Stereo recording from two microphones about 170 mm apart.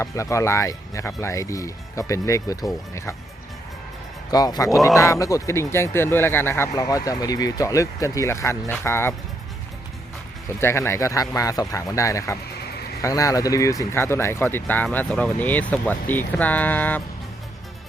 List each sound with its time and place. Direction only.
0.0 s speech: 15° left (ahead or behind)
4.3 s speech: 20° left (ahead or behind)
10.6 s speech: 15° left (ahead or behind)